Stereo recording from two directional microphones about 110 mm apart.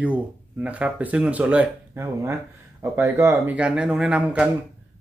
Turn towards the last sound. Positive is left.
turn(degrees=-10)  # may be behind; listen again after turning